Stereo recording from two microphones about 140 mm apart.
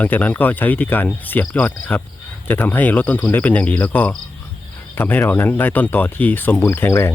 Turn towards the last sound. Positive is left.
turn(degrees=20)  # may be behind; listen again after turning